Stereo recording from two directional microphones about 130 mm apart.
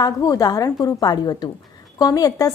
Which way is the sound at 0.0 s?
30° left (ahead or behind).